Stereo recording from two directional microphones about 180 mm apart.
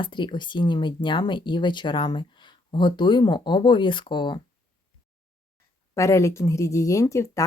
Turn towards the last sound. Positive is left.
turn(degrees=15)  # may be behind; listen again after turning